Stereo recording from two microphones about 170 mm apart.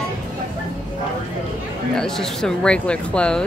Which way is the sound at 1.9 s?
Centre (ahead or behind).